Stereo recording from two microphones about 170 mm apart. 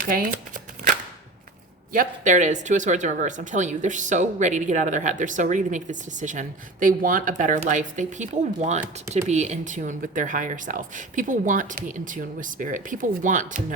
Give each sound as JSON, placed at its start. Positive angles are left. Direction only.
{"t": 0.0, "sound": "speech", "side_deg": -55}
{"t": 1.9, "sound": "speech", "side_deg": -50}